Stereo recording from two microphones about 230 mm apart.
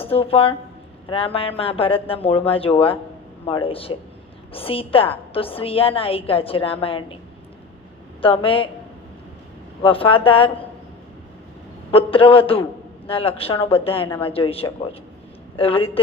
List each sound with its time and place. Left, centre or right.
0.0 s a woman's voice: left
8.2 s a woman's voice: left
9.8 s a woman's voice: left
11.9 s a woman's voice: left